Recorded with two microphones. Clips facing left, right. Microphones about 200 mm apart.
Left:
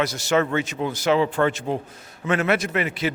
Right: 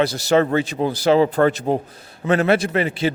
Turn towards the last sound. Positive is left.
turn(degrees=-30)  # may be behind; listen again after turning